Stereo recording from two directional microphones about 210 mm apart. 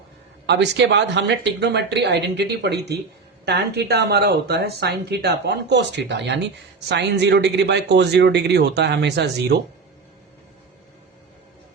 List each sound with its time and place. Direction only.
0.4 s speech: 55° right (ahead or behind)